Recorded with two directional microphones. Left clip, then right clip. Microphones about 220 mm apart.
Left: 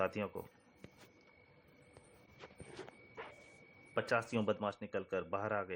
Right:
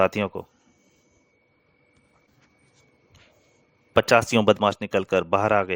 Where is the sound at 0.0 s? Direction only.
50° right (ahead or behind).